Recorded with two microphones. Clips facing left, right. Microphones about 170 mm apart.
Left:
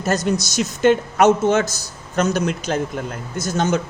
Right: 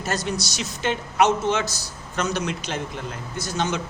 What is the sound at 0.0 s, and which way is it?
A woman's voice, 45° left (ahead or behind).